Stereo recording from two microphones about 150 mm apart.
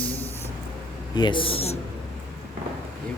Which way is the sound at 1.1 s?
30° left (ahead or behind).